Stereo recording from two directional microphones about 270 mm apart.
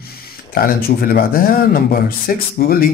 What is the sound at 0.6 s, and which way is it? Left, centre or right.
Speech, left.